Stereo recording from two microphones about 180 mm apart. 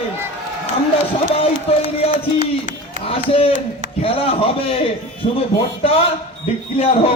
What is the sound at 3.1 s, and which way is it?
Speech, 30° left (ahead or behind).